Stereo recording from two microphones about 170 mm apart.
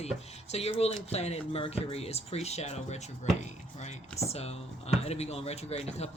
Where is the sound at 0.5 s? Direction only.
35° left (ahead or behind).